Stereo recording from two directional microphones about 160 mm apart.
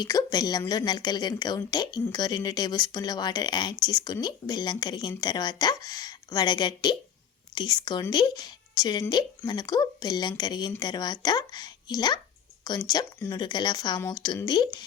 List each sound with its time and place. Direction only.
0.0 s a woman's voice: 25° left (ahead or behind)